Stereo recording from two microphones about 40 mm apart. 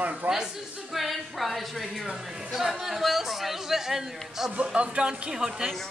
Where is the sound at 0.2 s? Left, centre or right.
Right.